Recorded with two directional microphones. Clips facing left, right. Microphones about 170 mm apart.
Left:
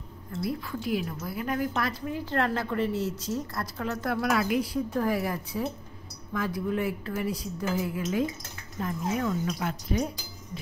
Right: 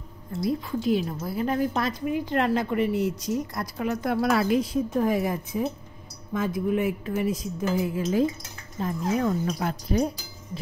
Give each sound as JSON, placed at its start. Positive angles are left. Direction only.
{"t": 0.4, "sound": "a woman's voice", "side_deg": -25}
{"t": 4.2, "sound": "a woman's voice", "side_deg": -30}
{"t": 8.0, "sound": "a woman's voice", "side_deg": -35}